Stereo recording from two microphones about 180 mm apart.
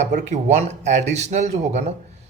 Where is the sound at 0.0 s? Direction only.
40° right (ahead or behind).